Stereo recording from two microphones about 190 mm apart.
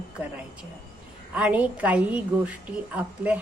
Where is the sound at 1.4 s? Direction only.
5° right (ahead or behind).